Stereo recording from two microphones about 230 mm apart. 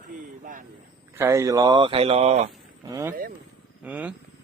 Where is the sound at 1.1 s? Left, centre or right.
Centre.